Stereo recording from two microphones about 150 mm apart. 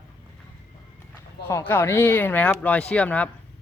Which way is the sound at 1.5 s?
15° left (ahead or behind).